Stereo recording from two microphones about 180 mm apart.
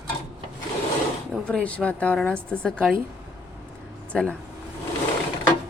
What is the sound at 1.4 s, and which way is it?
A woman's voice, 5° left (ahead or behind).